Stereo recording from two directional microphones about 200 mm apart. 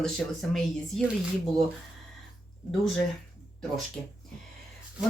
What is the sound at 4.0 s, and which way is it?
Speech, 5° left (ahead or behind).